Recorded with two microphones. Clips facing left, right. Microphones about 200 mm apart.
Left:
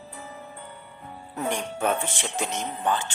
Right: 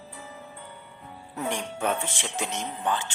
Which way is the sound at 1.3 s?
45° left (ahead or behind).